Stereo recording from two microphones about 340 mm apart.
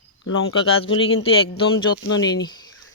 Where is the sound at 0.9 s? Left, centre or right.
Left.